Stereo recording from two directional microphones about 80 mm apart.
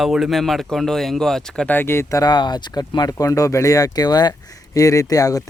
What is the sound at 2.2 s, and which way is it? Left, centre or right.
Speech, left.